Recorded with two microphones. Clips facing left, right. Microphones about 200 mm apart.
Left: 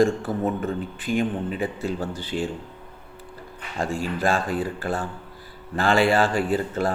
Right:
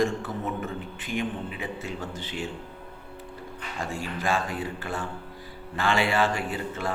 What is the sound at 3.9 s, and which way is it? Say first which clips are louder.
Speech: left 4 dB; 35° left (ahead or behind).